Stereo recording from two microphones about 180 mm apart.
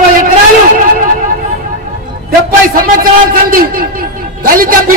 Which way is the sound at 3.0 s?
50° right (ahead or behind).